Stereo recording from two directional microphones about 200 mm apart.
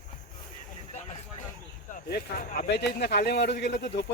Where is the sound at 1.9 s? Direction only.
50° left (ahead or behind).